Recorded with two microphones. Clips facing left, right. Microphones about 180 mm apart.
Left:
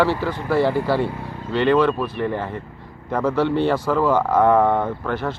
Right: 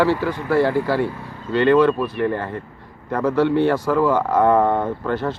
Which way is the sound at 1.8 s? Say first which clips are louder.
Right 2 dB; 15° right (ahead or behind).